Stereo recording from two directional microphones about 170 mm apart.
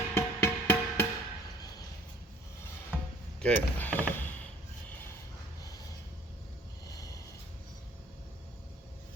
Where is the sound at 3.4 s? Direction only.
10° left (ahead or behind).